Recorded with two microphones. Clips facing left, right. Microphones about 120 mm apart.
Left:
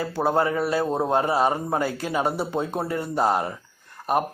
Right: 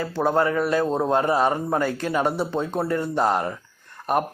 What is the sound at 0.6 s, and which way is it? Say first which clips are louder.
Speech: right 2 dB; 35° left (ahead or behind).